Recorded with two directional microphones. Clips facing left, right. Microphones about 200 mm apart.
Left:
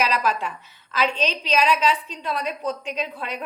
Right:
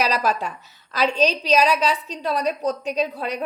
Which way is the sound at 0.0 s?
40° right (ahead or behind).